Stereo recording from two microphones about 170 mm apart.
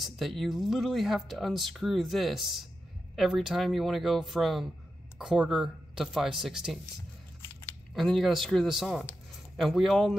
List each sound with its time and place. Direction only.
0.0 s speech: centre (ahead or behind)
7.9 s speech: centre (ahead or behind)